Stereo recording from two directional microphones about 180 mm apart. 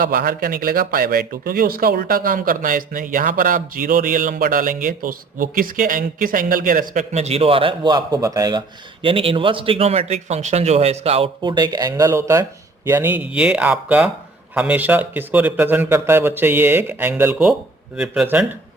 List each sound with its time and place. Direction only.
0.0 s speech: 55° right (ahead or behind); by 18.4 s 5° right (ahead or behind)